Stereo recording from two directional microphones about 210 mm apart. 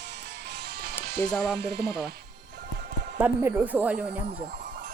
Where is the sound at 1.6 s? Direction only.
50° right (ahead or behind).